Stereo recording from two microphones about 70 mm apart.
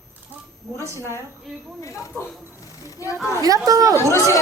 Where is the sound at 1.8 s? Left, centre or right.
Left.